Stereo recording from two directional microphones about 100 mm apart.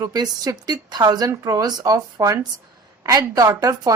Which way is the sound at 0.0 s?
40° right (ahead or behind).